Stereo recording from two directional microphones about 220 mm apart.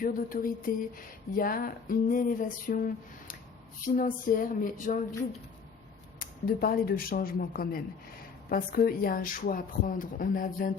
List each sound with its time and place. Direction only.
0.0 s speech: 40° left (ahead or behind)
6.1 s speech: 40° left (ahead or behind)